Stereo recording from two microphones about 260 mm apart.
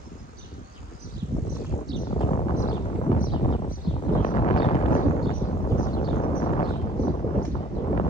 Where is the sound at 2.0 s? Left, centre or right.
Left.